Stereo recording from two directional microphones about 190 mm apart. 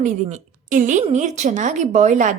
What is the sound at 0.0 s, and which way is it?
A woman's voice, 40° right (ahead or behind).